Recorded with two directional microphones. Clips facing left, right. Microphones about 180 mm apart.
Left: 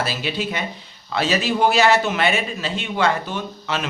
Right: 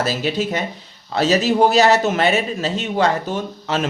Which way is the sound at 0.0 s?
40° right (ahead or behind).